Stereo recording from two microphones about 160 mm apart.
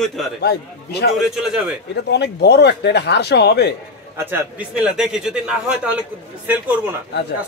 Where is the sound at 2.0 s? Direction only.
90° left.